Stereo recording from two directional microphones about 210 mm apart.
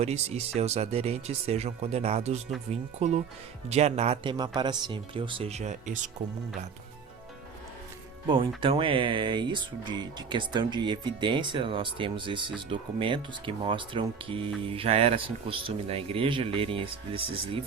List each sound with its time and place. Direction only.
0.0 s speech: 30° right (ahead or behind)
8.3 s speech: 25° right (ahead or behind)